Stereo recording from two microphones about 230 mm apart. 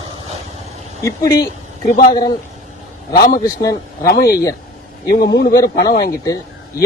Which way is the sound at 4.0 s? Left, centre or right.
Left.